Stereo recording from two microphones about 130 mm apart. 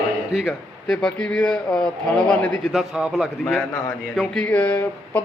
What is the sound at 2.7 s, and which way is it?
A man's voice, 5° right (ahead or behind).